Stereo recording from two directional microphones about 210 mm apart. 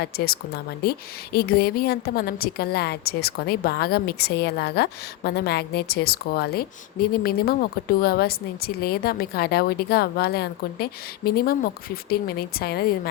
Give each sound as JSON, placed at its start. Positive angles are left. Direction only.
{"t": 0.0, "sound": "a woman's voice", "side_deg": 50}